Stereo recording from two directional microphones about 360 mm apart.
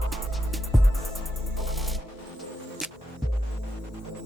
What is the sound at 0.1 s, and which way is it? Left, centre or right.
Music, centre.